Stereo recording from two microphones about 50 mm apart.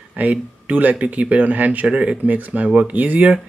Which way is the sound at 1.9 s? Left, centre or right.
Right.